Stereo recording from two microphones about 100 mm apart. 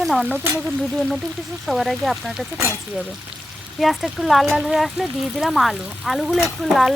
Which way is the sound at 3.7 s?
Centre (ahead or behind).